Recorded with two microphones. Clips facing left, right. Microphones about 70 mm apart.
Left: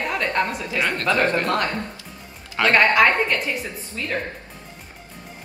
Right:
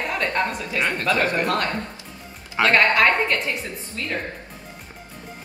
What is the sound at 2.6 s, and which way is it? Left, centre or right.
Speech, centre.